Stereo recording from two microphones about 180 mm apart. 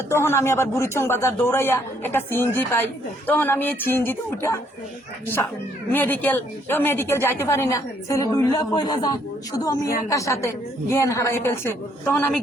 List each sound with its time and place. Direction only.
0.1 s a woman's voice: 15° left (ahead or behind)
5.9 s a woman's voice: 10° left (ahead or behind)